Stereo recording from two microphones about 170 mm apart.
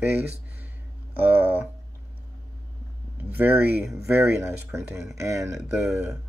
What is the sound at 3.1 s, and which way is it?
Speech, 10° right (ahead or behind).